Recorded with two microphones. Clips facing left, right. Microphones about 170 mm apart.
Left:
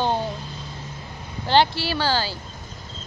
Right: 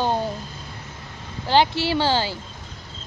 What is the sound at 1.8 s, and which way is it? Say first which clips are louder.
Speech: right 3 dB; 20° right (ahead or behind).